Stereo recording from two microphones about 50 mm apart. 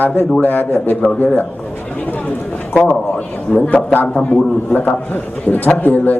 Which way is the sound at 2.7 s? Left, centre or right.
Left.